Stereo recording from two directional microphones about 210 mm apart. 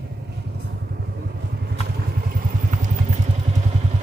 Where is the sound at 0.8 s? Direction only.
50° right (ahead or behind).